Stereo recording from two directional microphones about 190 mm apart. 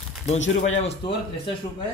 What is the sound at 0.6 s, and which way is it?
Speech, 35° left (ahead or behind).